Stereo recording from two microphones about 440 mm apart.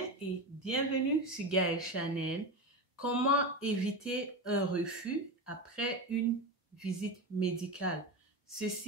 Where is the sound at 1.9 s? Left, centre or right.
Left.